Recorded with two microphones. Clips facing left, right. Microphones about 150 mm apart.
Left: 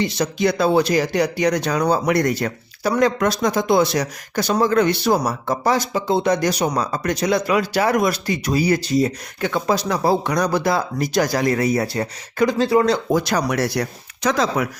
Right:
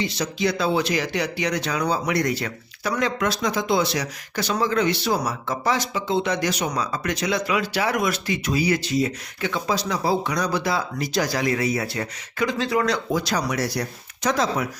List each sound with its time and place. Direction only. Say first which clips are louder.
0.0 s speech: left 5 dB; 50° left (ahead or behind); by 13.0 s 30° left (ahead or behind)
13.1 s speech: left 5 dB; 50° left (ahead or behind)
14.3 s speech: left 3 dB; 90° left